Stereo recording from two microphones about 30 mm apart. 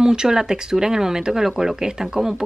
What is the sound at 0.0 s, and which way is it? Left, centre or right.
Speech, right.